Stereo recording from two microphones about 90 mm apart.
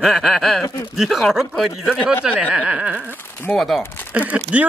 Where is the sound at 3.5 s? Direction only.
Centre (ahead or behind).